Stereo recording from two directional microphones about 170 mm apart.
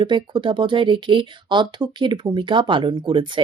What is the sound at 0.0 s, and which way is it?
A man's voice, 30° right (ahead or behind).